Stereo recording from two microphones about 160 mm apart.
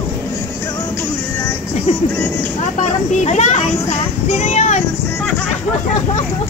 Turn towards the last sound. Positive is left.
turn(degrees=45)  # may be behind; listen again after turning